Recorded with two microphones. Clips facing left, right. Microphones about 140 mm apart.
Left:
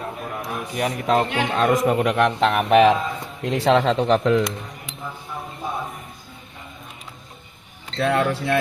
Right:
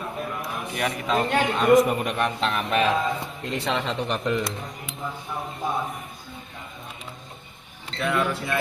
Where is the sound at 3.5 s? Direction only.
90° left.